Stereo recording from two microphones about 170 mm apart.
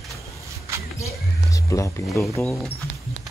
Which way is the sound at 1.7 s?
20° left (ahead or behind).